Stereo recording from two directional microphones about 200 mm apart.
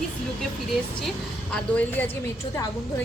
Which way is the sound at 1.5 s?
10° left (ahead or behind).